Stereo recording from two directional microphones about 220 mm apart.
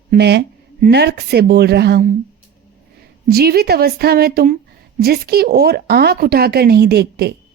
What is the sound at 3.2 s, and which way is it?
A woman's voice, 45° right (ahead or behind).